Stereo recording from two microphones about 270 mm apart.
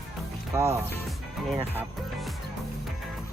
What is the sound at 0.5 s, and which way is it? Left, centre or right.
Speech, centre.